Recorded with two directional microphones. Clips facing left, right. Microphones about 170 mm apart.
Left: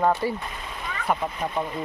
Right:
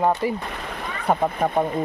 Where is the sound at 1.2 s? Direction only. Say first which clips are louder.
Right 7 dB; 50° right (ahead or behind).